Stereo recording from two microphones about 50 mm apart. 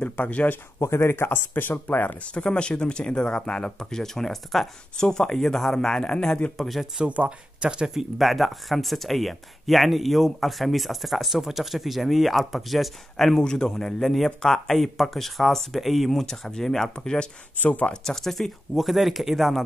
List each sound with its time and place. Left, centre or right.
0.0 s speech: left
0.7 s speech: left
2.2 s speech: left
7.0 s speech: right
7.9 s speech: centre
13.4 s speech: centre
17.6 s speech: left
18.0 s speech: centre